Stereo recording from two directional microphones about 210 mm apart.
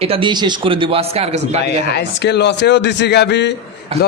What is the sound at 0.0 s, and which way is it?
Speech, 25° right (ahead or behind).